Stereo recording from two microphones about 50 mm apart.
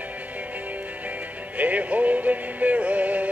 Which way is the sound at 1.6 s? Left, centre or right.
Right.